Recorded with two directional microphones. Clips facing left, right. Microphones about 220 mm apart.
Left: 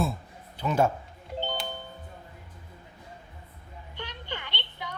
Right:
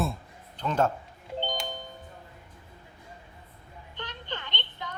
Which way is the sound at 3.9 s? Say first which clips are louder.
Even; 10° left (ahead or behind).